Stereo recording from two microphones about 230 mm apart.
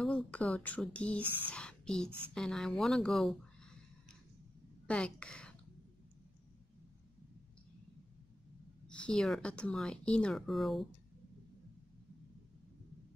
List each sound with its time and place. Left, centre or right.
0.0 s speech: centre
4.8 s a woman's voice: centre
8.8 s speech: centre